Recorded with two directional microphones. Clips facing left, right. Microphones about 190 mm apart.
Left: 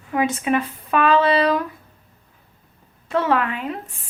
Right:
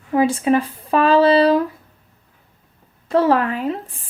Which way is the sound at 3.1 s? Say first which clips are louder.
Right 4 dB; 35° right (ahead or behind).